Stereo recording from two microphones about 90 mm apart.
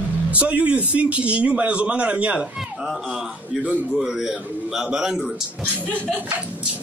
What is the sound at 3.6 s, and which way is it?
A man's voice, 5° right (ahead or behind).